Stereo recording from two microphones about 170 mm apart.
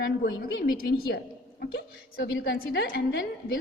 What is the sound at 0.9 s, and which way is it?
A woman's voice, 65° left (ahead or behind).